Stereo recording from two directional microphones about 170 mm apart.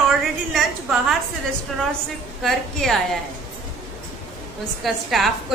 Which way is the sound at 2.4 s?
Centre (ahead or behind).